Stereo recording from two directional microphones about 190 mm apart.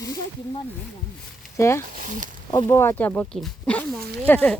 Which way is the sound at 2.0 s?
45° right (ahead or behind).